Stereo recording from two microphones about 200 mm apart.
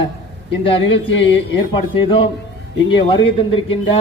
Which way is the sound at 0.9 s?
65° left (ahead or behind).